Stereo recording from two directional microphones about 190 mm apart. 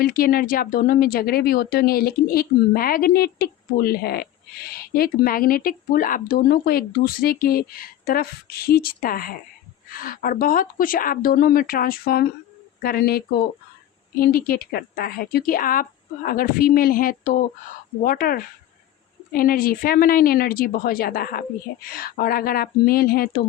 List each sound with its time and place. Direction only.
0.0 s speech: 50° left (ahead or behind)